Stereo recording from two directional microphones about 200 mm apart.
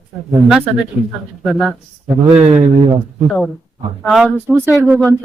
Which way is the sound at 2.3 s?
30° right (ahead or behind).